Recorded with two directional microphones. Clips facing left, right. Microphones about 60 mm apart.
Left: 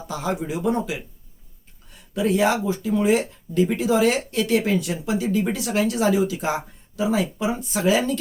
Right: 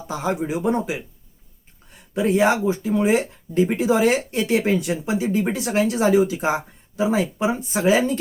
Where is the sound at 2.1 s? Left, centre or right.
Right.